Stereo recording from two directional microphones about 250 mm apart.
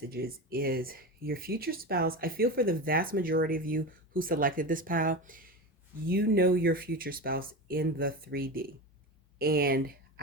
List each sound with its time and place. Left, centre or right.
0.1 s speech: right